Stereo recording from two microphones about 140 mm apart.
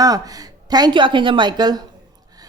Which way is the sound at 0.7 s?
30° right (ahead or behind).